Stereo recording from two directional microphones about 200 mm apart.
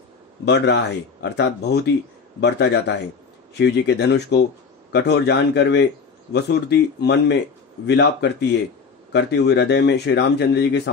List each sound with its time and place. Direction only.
0.5 s speech: 60° left (ahead or behind)